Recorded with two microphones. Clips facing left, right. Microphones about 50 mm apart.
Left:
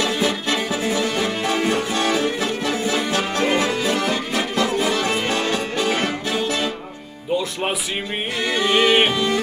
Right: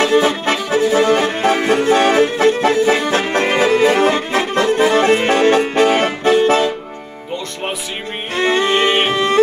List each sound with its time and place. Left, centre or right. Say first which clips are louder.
0.0 s music: right 7 dB; right
8.4 s music: right 4 dB; right